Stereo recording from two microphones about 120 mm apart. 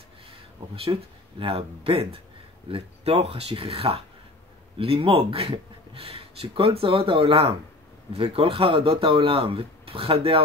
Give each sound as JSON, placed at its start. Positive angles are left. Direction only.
{"t": 1.4, "sound": "speech", "side_deg": -50}